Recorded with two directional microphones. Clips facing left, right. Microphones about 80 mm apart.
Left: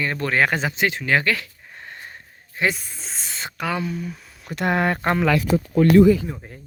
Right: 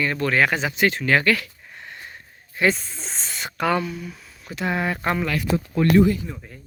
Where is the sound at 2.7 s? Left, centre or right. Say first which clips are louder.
Right 3 dB; centre.